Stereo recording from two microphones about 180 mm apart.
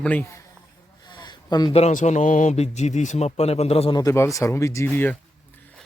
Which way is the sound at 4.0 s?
15° left (ahead or behind).